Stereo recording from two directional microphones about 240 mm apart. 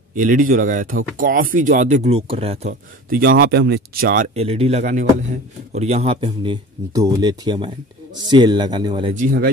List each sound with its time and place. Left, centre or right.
0.1 s speech: right
3.1 s speech: right; by 9.1 s centre
9.1 s speech: right